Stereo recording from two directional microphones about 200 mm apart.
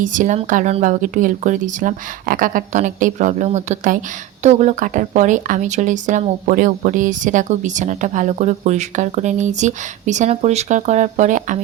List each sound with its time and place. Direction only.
0.0 s speech: 40° right (ahead or behind)